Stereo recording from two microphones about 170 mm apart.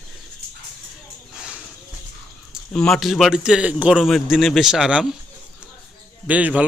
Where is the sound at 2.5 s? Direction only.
5° left (ahead or behind).